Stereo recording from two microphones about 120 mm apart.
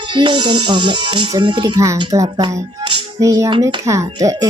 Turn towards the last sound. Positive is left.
turn(degrees=-30)  # may be behind; listen again after turning